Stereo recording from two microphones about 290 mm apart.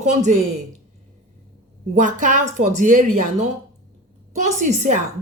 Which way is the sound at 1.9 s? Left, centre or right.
Right.